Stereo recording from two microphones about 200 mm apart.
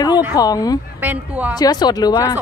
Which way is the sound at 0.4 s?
20° left (ahead or behind).